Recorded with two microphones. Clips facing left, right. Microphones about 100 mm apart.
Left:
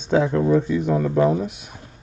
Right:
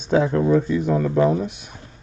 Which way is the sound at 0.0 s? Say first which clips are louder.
Even; 10° right (ahead or behind).